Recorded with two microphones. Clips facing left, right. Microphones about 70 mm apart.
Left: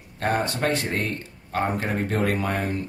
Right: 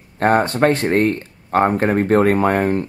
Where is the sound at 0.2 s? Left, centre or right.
Right.